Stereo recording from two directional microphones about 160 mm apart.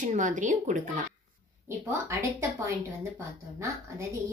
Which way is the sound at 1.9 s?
15° right (ahead or behind).